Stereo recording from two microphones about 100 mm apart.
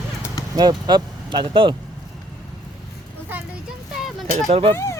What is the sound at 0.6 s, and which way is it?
Speech, 45° right (ahead or behind).